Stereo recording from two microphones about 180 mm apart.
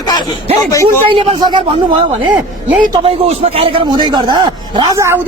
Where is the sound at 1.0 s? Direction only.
25° right (ahead or behind).